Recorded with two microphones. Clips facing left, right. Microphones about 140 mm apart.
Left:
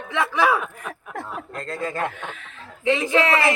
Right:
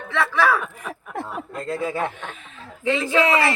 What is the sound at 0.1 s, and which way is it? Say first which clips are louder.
Speech: even; 15° left (ahead or behind).